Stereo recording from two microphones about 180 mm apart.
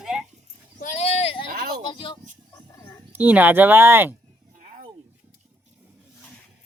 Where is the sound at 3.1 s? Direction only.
10° right (ahead or behind).